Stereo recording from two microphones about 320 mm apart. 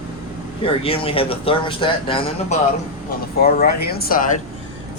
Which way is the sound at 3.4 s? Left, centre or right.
Left.